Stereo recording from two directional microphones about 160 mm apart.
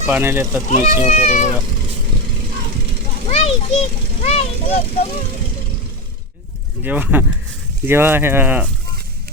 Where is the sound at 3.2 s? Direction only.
40° left (ahead or behind).